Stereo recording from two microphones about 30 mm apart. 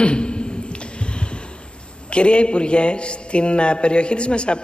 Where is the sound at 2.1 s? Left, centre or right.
Left.